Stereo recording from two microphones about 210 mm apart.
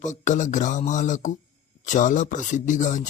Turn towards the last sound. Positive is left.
turn(degrees=35)  # may be behind; listen again after turning